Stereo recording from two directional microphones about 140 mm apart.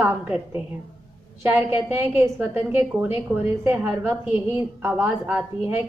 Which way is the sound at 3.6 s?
15° right (ahead or behind).